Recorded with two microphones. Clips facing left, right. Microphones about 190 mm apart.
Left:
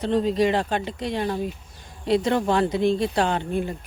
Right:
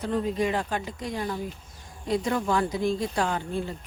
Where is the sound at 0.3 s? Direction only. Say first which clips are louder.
Left 6 dB; 85° left.